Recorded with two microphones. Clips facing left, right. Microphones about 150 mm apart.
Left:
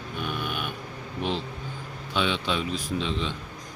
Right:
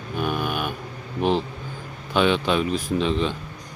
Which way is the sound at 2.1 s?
55° right (ahead or behind).